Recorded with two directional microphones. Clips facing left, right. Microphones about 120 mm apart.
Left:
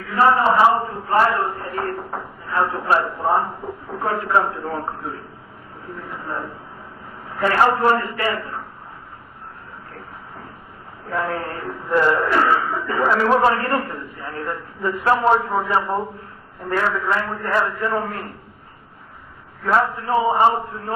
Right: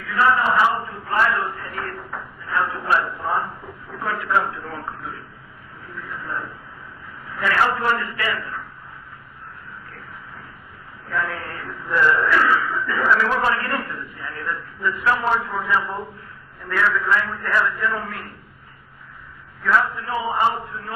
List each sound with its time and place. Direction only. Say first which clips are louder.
0.1 s a man's voice: left 3 dB; 35° left (ahead or behind)
11.1 s a man's voice: left 3 dB; 35° left (ahead or behind)
19.6 s a man's voice: left 2 dB; 35° left (ahead or behind)